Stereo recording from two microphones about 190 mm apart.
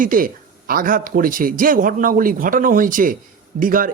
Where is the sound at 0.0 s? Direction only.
45° right (ahead or behind).